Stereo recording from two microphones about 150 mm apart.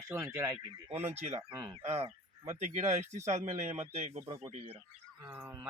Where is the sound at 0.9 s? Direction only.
45° right (ahead or behind).